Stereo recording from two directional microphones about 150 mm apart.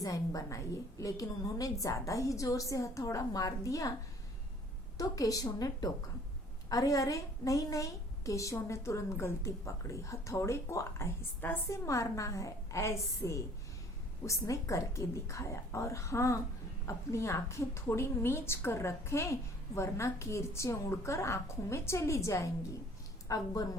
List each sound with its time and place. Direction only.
0.0 s a woman's voice: 20° left (ahead or behind)
4.9 s a woman's voice: 25° left (ahead or behind)